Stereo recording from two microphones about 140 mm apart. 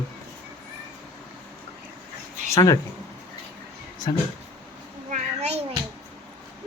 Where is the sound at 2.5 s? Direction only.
25° left (ahead or behind).